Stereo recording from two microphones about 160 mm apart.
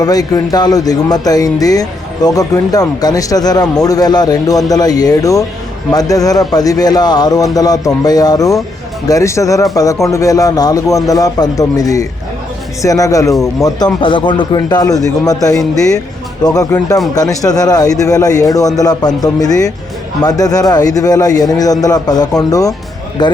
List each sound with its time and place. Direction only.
0.0 s speech: 25° left (ahead or behind)